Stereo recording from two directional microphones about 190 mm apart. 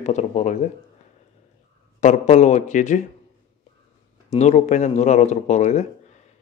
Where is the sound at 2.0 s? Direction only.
35° left (ahead or behind).